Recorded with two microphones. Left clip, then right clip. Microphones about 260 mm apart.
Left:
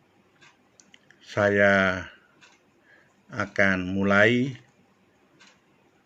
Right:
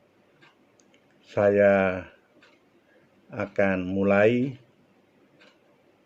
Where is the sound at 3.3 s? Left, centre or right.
Left.